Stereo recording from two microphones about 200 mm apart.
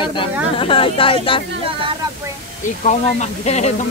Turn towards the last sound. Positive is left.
turn(degrees=35)  # may be behind; listen again after turning